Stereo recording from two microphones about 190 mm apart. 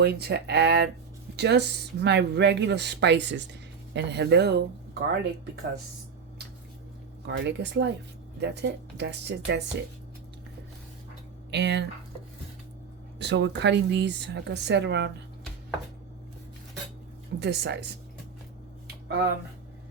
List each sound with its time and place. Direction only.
0.0 s speech: 60° right (ahead or behind)
7.3 s speech: 70° right (ahead or behind)
11.5 s speech: 65° right (ahead or behind)
13.1 s speech: 65° right (ahead or behind)
17.4 s speech: 65° right (ahead or behind)